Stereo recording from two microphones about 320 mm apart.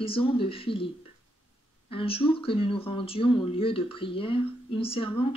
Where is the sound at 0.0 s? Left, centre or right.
Centre.